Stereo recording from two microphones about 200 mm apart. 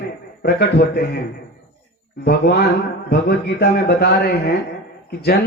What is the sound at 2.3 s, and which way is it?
A man's voice, 50° left (ahead or behind).